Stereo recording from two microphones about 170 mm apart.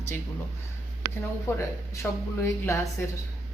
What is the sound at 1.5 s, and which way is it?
A woman's voice, 15° left (ahead or behind).